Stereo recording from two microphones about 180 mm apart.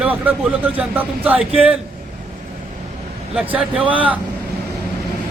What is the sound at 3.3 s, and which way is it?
Speech, 5° right (ahead or behind).